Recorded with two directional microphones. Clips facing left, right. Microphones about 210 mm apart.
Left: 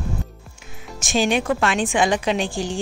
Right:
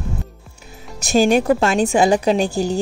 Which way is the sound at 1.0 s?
40° right (ahead or behind).